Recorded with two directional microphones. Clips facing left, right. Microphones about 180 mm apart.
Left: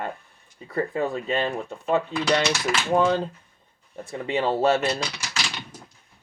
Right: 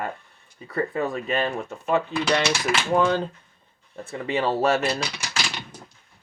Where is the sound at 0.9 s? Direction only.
25° left (ahead or behind).